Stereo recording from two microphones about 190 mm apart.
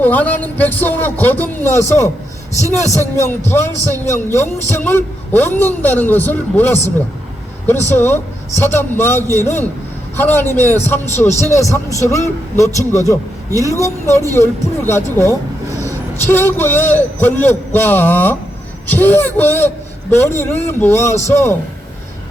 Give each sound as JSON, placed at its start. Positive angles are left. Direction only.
{"t": 0.0, "sound": "a man's voice", "side_deg": 10}
{"t": 7.9, "sound": "a man's voice", "side_deg": 10}